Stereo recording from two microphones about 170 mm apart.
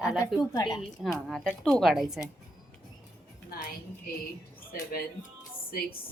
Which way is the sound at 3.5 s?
65° left (ahead or behind).